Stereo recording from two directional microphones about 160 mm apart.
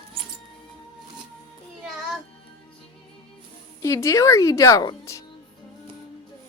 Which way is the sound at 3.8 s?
20° left (ahead or behind).